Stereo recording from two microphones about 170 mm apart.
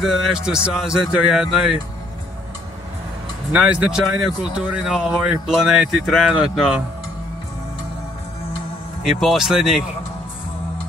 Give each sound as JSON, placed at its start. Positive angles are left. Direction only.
{"t": 0.0, "sound": "speech", "side_deg": 0}
{"t": 3.5, "sound": "speech", "side_deg": -5}
{"t": 9.2, "sound": "speech", "side_deg": 0}